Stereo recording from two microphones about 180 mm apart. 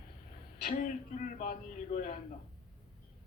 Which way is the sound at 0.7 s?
45° left (ahead or behind).